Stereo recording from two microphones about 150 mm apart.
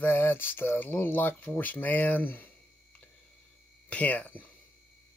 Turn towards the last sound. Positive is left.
turn(degrees=10)  # may be behind; listen again after turning